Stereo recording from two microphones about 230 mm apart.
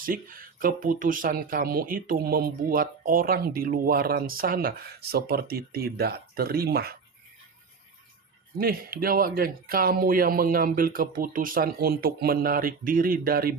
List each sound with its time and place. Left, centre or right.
0.0 s speech: right
8.5 s speech: right